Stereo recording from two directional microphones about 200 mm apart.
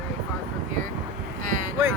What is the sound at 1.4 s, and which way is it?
Speech, 40° right (ahead or behind).